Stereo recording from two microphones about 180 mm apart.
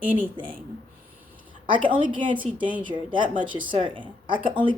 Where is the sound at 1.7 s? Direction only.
25° right (ahead or behind).